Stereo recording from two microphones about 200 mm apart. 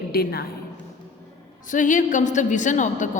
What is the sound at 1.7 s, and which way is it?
A woman's voice, 40° left (ahead or behind).